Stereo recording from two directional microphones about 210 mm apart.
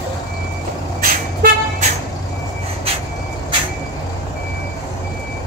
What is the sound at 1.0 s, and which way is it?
Vehicle, 40° right (ahead or behind).